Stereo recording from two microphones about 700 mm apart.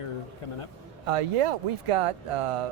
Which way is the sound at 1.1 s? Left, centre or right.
Right.